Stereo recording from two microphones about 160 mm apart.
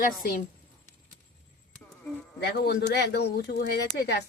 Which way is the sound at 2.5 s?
90° left.